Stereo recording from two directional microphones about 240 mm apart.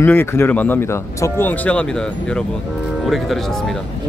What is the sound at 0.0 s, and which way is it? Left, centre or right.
Speech, centre.